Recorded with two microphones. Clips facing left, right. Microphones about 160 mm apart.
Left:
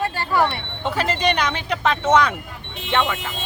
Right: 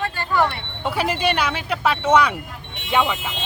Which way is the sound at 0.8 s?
10° right (ahead or behind).